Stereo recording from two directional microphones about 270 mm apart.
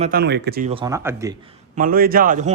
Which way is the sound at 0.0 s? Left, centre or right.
Right.